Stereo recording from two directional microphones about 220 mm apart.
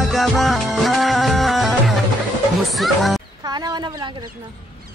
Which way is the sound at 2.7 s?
Centre (ahead or behind).